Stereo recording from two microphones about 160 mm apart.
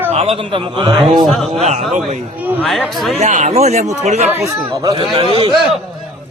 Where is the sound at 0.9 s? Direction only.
Centre (ahead or behind).